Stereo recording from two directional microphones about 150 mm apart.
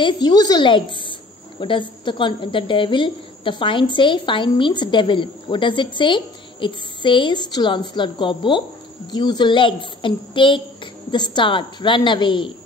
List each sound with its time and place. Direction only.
0.0 s a woman's voice: 25° left (ahead or behind)